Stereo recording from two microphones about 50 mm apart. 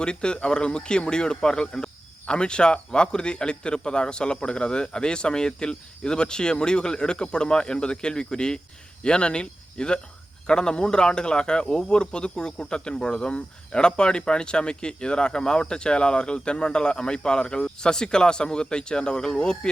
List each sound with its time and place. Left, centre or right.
0.0 s a man's voice: centre